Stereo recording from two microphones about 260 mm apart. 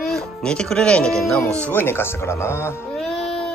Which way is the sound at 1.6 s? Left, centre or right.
Centre.